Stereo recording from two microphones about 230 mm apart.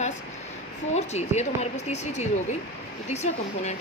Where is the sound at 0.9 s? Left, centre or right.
Left.